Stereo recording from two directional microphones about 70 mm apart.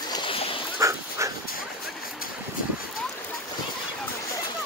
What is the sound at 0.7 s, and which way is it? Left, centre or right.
Dog, right.